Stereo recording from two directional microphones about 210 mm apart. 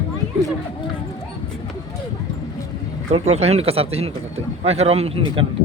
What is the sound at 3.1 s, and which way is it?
Speech, 30° right (ahead or behind).